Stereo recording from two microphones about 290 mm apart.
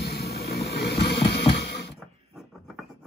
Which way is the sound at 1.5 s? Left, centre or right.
Left.